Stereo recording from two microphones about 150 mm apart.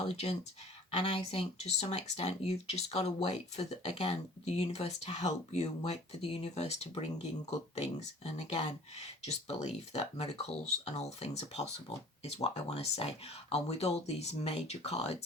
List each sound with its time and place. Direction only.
0.0 s speech: 45° left (ahead or behind)